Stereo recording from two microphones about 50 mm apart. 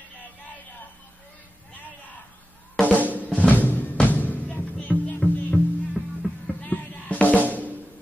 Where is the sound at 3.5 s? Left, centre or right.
Left.